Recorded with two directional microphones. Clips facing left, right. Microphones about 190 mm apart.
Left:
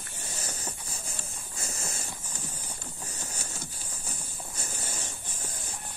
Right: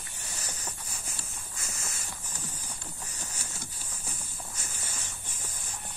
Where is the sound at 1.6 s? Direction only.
35° left (ahead or behind).